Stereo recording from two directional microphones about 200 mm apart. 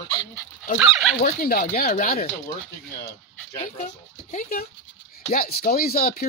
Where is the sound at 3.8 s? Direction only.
40° left (ahead or behind).